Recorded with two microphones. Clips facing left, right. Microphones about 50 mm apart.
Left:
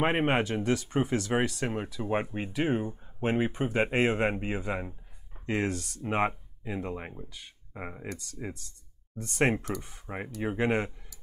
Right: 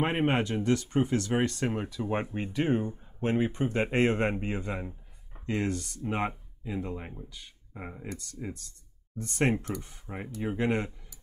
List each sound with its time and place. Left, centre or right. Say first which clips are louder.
0.0 s speech: left 1 dB; centre
1.5 s speech: right 1 dB; centre
6.0 s speech: left 3 dB; left
9.4 s speech: left 1 dB; centre